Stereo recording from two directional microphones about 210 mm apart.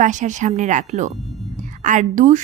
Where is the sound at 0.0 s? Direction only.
35° right (ahead or behind).